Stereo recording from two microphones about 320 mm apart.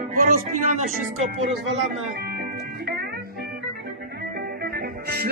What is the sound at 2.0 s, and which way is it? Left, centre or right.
Music, right.